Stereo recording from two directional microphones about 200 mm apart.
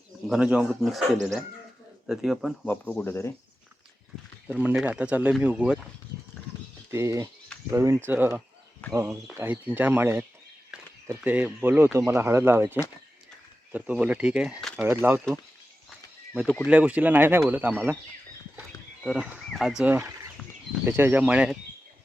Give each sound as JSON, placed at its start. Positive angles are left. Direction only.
{"t": 0.3, "sound": "speech", "side_deg": -5}
{"t": 2.6, "sound": "speech", "side_deg": 10}
{"t": 4.4, "sound": "speech", "side_deg": -10}
{"t": 6.9, "sound": "speech", "side_deg": -15}
{"t": 16.6, "sound": "speech", "side_deg": -5}
{"t": 19.0, "sound": "speech", "side_deg": -5}